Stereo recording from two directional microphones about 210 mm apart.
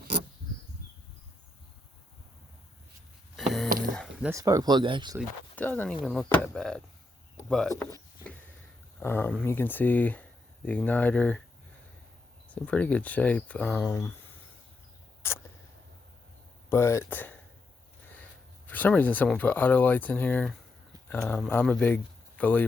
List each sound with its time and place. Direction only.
3.3 s a sound: centre (ahead or behind)
4.3 s speech: 15° right (ahead or behind)
5.5 s speech: 10° left (ahead or behind)
7.3 s a sound: 5° left (ahead or behind)
9.0 s speech: 10° left (ahead or behind)
12.6 s speech: 5° left (ahead or behind)
16.6 s speech: 15° left (ahead or behind)
18.7 s speech: 10° left (ahead or behind)